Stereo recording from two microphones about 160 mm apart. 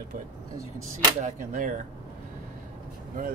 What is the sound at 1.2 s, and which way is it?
Speech, 55° right (ahead or behind).